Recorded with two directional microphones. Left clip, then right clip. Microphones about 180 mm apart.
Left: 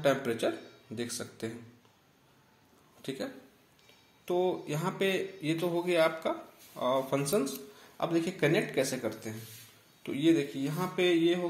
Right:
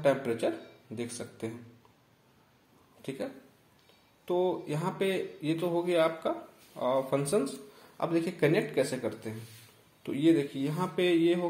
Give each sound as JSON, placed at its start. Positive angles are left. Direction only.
{"t": 0.0, "sound": "a man's voice", "side_deg": -5}
{"t": 3.0, "sound": "speech", "side_deg": -5}
{"t": 4.3, "sound": "speech", "side_deg": -10}